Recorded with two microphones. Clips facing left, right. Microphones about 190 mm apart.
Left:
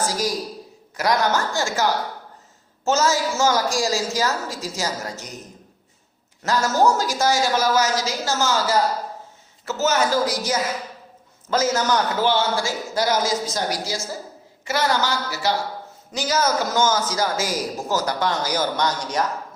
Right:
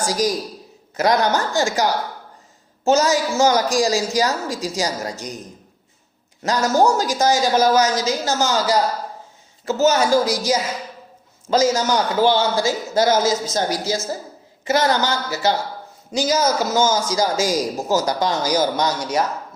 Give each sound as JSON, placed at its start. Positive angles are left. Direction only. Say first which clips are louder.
{"t": 0.1, "sound": "a woman's voice", "louder": "right 4 dB", "side_deg": -20}
{"t": 6.4, "sound": "a woman's voice", "louder": "right 2 dB", "side_deg": -15}